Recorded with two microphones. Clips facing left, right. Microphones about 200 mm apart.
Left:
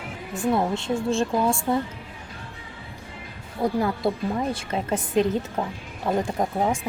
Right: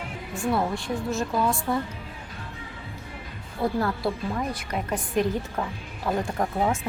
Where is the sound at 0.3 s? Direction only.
20° left (ahead or behind).